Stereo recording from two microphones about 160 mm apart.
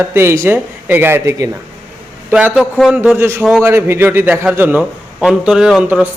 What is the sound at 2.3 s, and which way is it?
Speech, 5° right (ahead or behind).